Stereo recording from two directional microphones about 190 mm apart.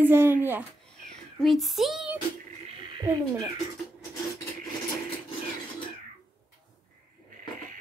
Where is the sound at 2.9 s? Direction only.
20° right (ahead or behind).